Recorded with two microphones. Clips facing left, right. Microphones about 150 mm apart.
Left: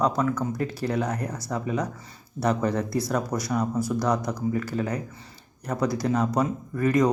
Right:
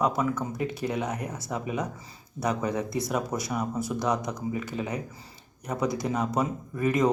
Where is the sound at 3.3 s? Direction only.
5° right (ahead or behind).